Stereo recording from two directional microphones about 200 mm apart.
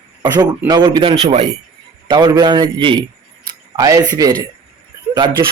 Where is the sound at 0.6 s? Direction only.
20° right (ahead or behind).